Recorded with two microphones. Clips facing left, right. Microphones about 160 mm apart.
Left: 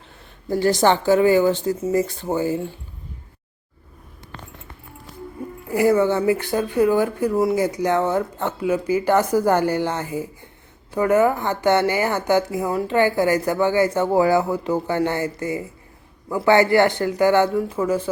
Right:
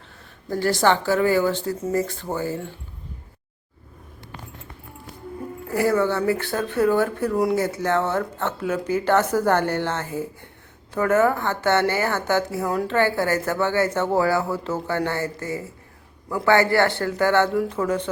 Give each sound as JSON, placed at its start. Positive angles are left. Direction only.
{"t": 0.4, "sound": "speech", "side_deg": 15}
{"t": 5.7, "sound": "speech", "side_deg": 15}